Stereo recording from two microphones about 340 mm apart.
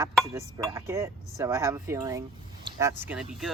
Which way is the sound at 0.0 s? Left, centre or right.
Centre.